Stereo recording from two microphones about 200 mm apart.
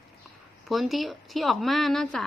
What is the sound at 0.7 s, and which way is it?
Speech, centre (ahead or behind).